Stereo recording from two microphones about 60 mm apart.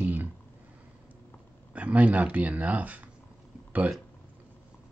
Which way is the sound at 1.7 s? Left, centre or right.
Right.